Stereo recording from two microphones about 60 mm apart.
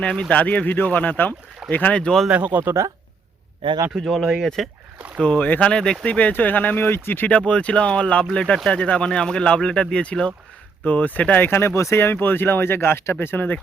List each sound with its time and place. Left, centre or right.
0.3 s speech: left
2.3 s speech: right
3.9 s speech: centre
4.9 s boat: centre
5.2 s speech: left
6.1 s speech: left
7.3 s speech: centre; by 12.1 s left
12.1 s speech: left